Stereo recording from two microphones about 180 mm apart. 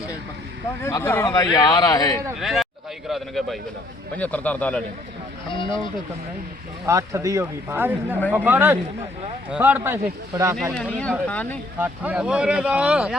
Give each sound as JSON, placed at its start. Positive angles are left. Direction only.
{"t": 0.8, "sound": "a man's voice", "side_deg": 15}
{"t": 2.4, "sound": "speech", "side_deg": 0}
{"t": 5.5, "sound": "a man's voice", "side_deg": 25}
{"t": 6.8, "sound": "speech", "side_deg": -15}
{"t": 10.5, "sound": "speech", "side_deg": 0}
{"t": 11.8, "sound": "speech", "side_deg": -5}